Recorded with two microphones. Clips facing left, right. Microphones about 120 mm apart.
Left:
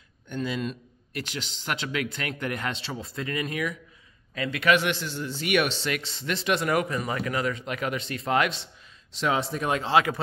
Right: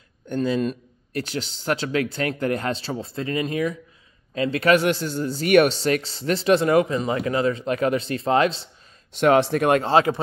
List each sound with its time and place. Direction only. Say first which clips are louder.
0.3 s speech: right 7 dB; 40° right (ahead or behind)
9.1 s speech: right 9 dB; 60° right (ahead or behind)